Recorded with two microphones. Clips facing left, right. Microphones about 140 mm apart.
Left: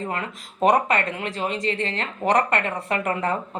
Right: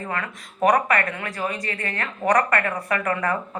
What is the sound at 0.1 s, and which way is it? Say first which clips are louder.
Speech: even; 25° left (ahead or behind).